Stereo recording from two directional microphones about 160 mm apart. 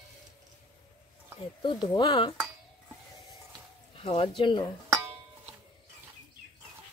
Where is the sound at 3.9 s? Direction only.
35° left (ahead or behind).